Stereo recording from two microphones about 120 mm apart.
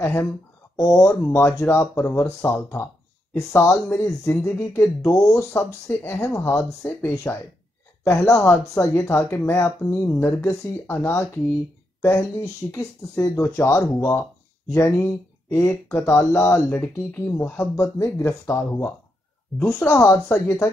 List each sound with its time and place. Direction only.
0.0 s speech: 15° left (ahead or behind)